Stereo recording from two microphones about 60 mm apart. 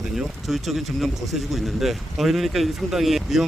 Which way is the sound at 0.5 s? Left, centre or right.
Centre.